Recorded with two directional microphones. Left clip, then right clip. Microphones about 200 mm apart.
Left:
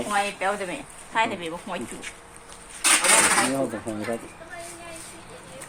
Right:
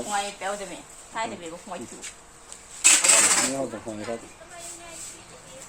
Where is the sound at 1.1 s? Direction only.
35° left (ahead or behind).